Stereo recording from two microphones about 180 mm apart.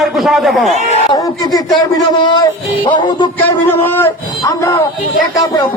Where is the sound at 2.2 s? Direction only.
25° left (ahead or behind).